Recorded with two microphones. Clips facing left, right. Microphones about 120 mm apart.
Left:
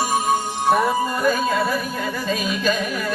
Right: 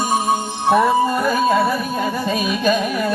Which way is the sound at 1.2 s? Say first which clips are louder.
Right 3 dB; 20° right (ahead or behind).